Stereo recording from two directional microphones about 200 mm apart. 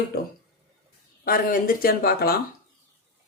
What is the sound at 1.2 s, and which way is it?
A woman's voice, 45° left (ahead or behind).